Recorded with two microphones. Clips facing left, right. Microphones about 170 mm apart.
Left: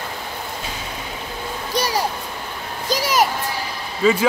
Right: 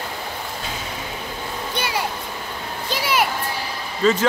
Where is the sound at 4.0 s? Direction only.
10° left (ahead or behind).